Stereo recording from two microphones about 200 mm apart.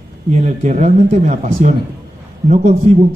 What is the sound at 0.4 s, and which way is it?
A man's voice, 35° right (ahead or behind).